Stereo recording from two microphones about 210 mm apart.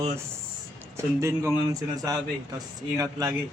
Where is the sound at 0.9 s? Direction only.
15° right (ahead or behind).